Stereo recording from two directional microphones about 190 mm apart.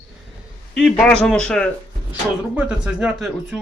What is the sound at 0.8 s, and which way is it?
Speech, 5° left (ahead or behind).